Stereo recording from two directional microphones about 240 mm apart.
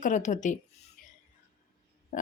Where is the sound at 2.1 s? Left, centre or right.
Left.